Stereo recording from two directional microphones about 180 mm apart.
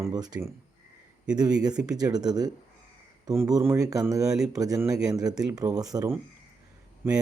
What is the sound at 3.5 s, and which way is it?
Speech, 15° right (ahead or behind).